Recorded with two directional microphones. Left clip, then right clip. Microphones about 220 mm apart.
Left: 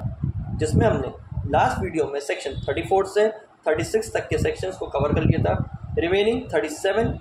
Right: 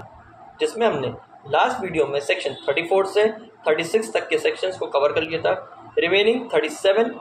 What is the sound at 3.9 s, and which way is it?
Speech, 30° right (ahead or behind).